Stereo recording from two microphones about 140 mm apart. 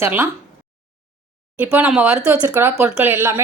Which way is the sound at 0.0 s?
15° right (ahead or behind).